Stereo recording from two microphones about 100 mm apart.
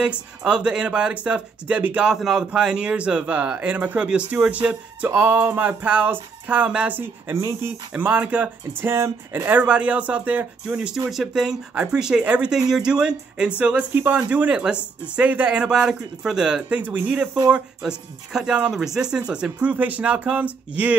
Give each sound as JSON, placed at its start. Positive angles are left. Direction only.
{"t": 0.0, "sound": "speech", "side_deg": -10}
{"t": 8.9, "sound": "speech", "side_deg": -25}